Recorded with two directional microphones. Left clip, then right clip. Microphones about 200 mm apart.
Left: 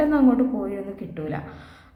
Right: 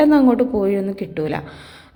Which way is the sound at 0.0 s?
35° right (ahead or behind).